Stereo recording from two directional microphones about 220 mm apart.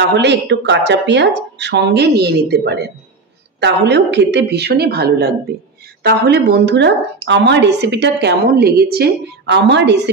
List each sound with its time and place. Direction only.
0.0 s a woman's voice: 50° right (ahead or behind)